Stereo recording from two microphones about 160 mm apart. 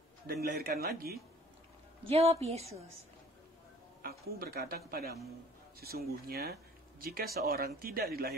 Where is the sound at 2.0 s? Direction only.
40° right (ahead or behind).